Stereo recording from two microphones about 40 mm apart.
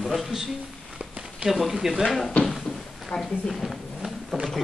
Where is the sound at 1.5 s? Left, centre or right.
Centre.